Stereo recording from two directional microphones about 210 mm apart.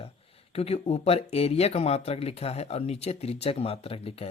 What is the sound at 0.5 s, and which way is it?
Speech, 30° left (ahead or behind).